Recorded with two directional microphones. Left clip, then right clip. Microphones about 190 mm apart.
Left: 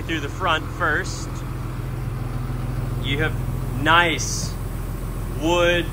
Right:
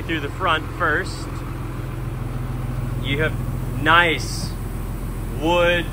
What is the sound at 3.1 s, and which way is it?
Speech, 5° left (ahead or behind).